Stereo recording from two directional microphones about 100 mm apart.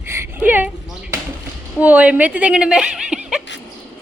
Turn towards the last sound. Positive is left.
turn(degrees=-10)  # may be behind; listen again after turning